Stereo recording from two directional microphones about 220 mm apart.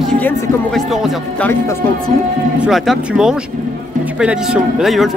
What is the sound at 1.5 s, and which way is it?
Speech, 15° left (ahead or behind).